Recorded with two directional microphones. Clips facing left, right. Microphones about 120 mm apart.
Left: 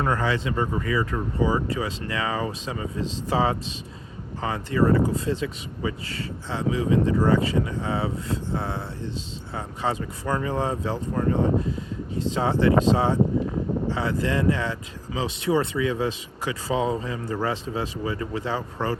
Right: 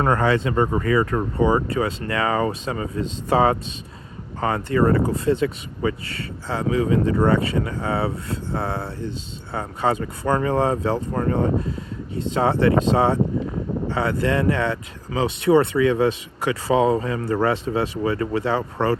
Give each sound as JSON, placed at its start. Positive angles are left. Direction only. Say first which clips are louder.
{"t": 0.0, "sound": "speech", "louder": "right 5 dB", "side_deg": -55}